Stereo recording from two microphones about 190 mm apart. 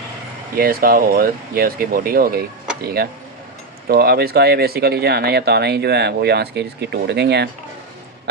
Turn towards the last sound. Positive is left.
turn(degrees=-60)  # may be behind; listen again after turning